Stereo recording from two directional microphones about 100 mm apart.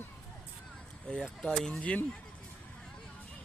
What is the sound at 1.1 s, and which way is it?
Speech, 10° left (ahead or behind).